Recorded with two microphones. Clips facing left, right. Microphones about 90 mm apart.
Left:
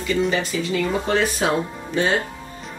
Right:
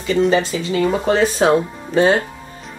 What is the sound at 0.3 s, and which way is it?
Speech, 30° right (ahead or behind).